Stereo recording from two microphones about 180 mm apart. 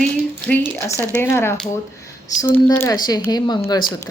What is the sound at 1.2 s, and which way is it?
A woman's voice, 15° left (ahead or behind).